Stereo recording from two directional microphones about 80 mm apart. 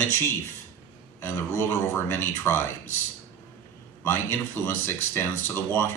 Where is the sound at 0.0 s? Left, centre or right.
Left.